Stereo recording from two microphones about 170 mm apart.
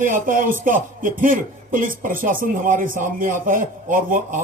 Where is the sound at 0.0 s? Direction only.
55° right (ahead or behind).